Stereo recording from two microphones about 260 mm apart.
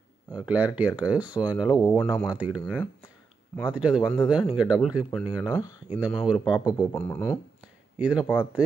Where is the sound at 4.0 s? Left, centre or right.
Centre.